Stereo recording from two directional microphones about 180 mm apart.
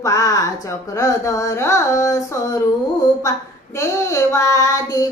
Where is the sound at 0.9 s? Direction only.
20° left (ahead or behind).